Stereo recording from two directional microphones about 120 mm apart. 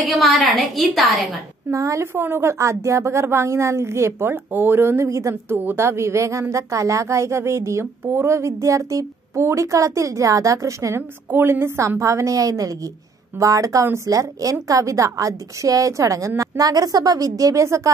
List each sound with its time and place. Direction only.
0.0 s a woman's voice: centre (ahead or behind)
1.7 s a woman's voice: 25° right (ahead or behind)